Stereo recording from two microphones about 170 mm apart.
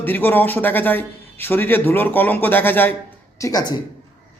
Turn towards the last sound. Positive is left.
turn(degrees=25)  # may be behind; listen again after turning